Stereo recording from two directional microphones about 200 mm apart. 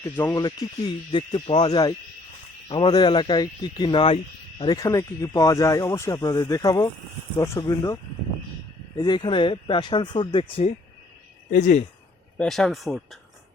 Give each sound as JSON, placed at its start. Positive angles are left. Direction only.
{"t": 0.0, "sound": "speech", "side_deg": 10}
{"t": 9.0, "sound": "speech", "side_deg": 20}
{"t": 12.4, "sound": "speech", "side_deg": 0}